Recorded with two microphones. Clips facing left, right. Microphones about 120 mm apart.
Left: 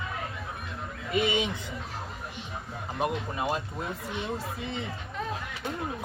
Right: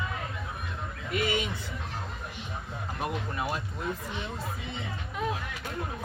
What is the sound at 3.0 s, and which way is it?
Speech, 20° left (ahead or behind).